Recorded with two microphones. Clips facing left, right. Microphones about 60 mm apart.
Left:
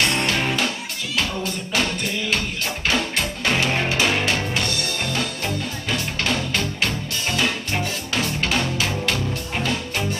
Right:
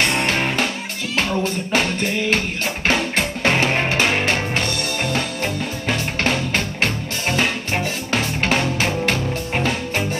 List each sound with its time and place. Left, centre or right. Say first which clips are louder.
0.0 s music: right 2 dB; right